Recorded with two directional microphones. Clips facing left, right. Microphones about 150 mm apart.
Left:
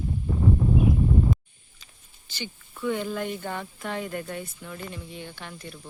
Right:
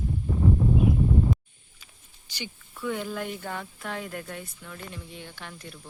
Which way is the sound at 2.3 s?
15° right (ahead or behind).